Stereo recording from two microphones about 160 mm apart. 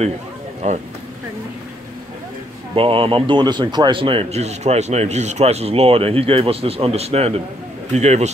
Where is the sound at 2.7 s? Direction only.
35° right (ahead or behind).